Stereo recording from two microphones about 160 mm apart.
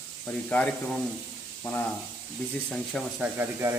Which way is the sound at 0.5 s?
5° left (ahead or behind).